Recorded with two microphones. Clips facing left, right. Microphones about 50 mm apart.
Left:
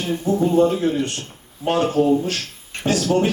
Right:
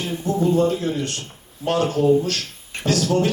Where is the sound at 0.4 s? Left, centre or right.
Left.